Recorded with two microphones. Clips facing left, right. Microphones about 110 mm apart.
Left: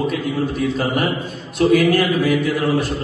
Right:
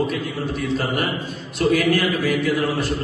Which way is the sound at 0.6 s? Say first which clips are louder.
Left 3 dB; 50° left (ahead or behind).